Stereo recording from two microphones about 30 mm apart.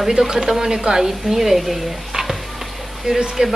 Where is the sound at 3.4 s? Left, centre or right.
Right.